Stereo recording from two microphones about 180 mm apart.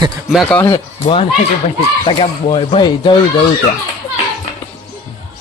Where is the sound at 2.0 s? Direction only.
25° left (ahead or behind).